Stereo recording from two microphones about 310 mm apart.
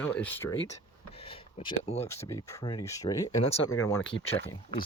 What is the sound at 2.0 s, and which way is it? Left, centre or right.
Speech, centre.